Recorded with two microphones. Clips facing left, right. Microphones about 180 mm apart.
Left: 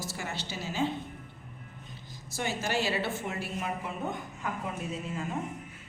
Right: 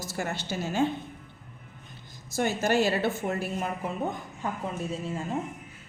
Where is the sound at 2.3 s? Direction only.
50° right (ahead or behind).